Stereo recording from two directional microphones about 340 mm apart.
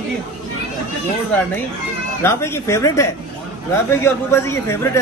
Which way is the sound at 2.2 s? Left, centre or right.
Centre.